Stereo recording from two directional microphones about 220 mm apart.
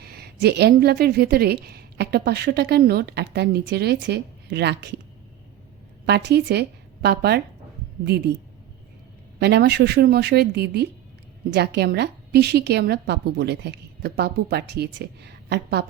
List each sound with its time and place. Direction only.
0.0 s a woman's voice: 45° right (ahead or behind)
6.1 s a woman's voice: 50° right (ahead or behind)
9.4 s a woman's voice: 50° right (ahead or behind)